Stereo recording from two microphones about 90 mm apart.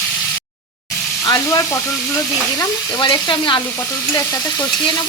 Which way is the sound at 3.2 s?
60° left (ahead or behind).